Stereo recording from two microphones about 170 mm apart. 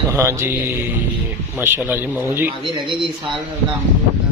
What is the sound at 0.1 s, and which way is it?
Speech, 15° right (ahead or behind).